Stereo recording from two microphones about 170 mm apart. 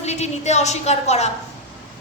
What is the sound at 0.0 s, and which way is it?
Speech, 40° left (ahead or behind).